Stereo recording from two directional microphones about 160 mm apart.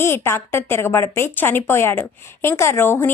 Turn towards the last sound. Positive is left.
turn(degrees=15)  # may be behind; listen again after turning